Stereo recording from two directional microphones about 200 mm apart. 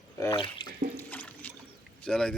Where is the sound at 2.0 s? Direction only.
5° left (ahead or behind).